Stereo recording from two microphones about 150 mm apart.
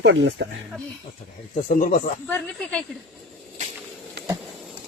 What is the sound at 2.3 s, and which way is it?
Speech, 10° left (ahead or behind).